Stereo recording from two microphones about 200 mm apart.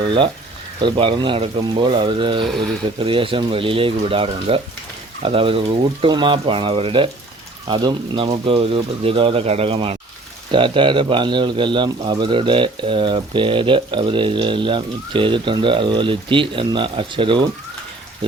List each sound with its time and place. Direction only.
0.0 s speech: 25° right (ahead or behind)